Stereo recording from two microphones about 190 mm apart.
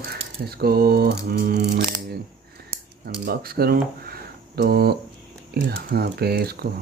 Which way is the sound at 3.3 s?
55° right (ahead or behind).